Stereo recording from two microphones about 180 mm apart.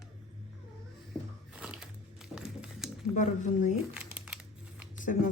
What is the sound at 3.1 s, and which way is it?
Speech, 45° left (ahead or behind).